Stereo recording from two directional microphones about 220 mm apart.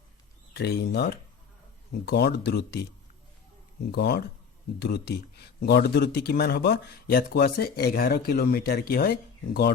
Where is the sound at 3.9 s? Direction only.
50° left (ahead or behind).